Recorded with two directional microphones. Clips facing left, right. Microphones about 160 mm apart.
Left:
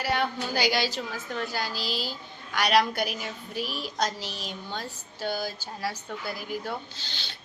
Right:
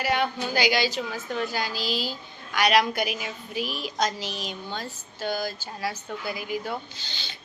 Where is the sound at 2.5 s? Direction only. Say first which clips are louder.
Right 2 dB; 5° right (ahead or behind).